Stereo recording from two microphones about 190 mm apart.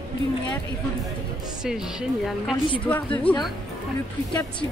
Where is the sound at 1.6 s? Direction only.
5° right (ahead or behind).